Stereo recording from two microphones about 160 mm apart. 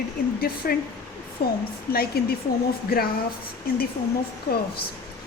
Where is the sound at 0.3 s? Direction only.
70° left (ahead or behind).